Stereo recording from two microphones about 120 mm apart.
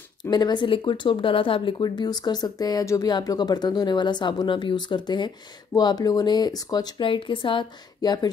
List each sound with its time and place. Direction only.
0.2 s speech: 35° left (ahead or behind)